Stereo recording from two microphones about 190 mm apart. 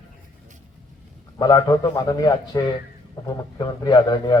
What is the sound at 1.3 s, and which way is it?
Speech, 20° left (ahead or behind).